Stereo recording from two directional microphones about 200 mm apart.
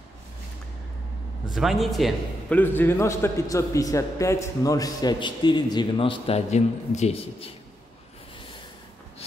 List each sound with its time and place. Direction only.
1.5 s a man's voice: centre (ahead or behind)
2.6 s a man's voice: 10° left (ahead or behind); by 7.5 s 30° left (ahead or behind)